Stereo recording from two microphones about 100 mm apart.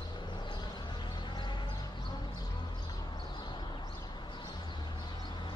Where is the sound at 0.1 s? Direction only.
50° left (ahead or behind).